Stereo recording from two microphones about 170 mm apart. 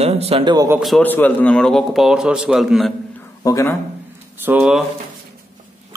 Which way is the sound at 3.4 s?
20° left (ahead or behind).